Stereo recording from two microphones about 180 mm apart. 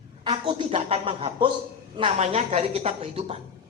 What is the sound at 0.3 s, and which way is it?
A woman's voice, 30° right (ahead or behind).